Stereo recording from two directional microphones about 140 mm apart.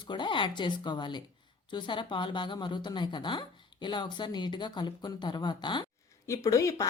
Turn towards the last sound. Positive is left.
turn(degrees=25)  # may be behind; listen again after turning